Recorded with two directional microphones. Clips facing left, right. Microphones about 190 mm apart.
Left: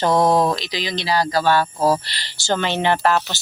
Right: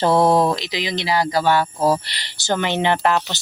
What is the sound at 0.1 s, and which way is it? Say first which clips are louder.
Speech: right 1 dB; 5° right (ahead or behind).